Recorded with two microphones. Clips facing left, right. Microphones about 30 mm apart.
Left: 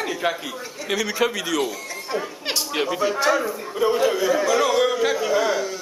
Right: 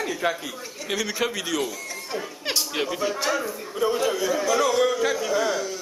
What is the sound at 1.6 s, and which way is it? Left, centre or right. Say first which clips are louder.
A man's voice: left 3 dB; centre.